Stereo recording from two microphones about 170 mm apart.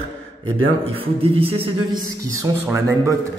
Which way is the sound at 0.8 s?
35° right (ahead or behind).